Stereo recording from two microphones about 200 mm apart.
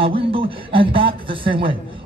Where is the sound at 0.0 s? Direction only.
25° right (ahead or behind).